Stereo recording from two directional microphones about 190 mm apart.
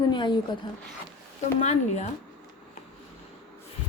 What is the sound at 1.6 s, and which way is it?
Speech, 35° left (ahead or behind).